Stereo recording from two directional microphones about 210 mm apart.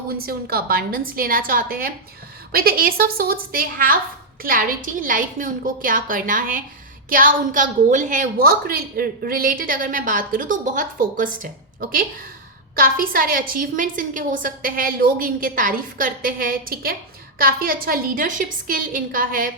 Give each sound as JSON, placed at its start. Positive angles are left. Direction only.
{"t": 0.1, "sound": "a woman's voice", "side_deg": -45}